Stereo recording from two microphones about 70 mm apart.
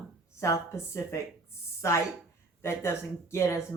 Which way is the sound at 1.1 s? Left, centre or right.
Left.